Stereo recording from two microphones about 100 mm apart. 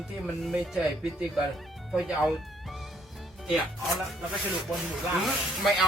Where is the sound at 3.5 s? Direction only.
Centre (ahead or behind).